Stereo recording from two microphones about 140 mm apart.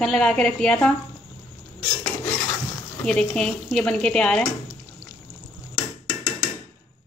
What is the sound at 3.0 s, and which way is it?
A woman's voice, 5° left (ahead or behind).